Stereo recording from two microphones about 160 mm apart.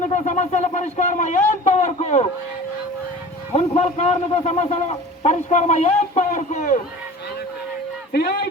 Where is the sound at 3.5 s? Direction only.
40° left (ahead or behind).